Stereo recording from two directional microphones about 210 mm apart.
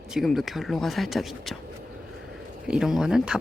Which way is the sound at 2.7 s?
Centre (ahead or behind).